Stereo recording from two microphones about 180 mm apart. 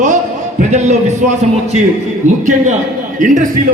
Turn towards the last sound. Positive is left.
turn(degrees=-45)  # may be behind; listen again after turning